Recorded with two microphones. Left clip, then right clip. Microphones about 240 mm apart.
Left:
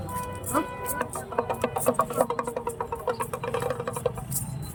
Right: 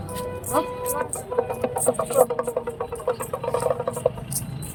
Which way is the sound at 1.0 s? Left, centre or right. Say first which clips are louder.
Right 2 dB; centre.